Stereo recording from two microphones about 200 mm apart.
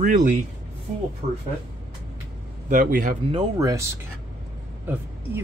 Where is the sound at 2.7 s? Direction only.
40° right (ahead or behind).